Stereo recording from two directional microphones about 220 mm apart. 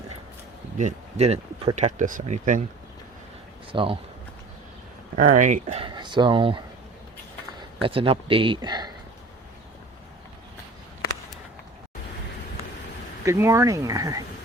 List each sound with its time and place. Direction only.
0.8 s speech: 30° right (ahead or behind)
3.7 s speech: 25° right (ahead or behind)
5.1 s speech: 35° right (ahead or behind)
7.8 s speech: 25° right (ahead or behind)
13.2 s speech: 10° right (ahead or behind)